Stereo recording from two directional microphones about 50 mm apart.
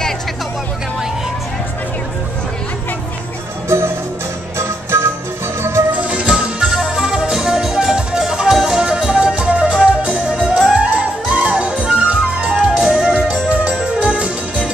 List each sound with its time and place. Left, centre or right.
3.6 s music: right
6.0 s music: right
6.6 s music: centre